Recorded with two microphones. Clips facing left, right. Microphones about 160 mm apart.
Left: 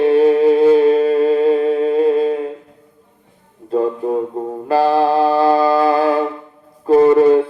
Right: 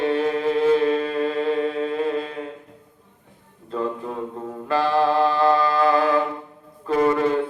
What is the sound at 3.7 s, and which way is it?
Music, 35° left (ahead or behind).